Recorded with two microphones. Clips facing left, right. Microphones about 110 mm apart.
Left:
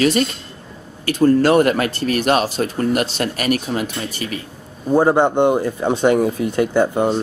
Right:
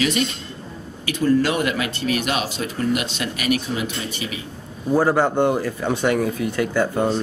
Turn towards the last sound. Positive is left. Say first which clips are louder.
# left 4 dB
turn(degrees=25)  # may be behind; listen again after turning